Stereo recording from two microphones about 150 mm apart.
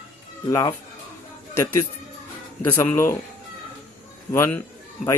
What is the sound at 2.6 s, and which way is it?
Speech, 15° left (ahead or behind).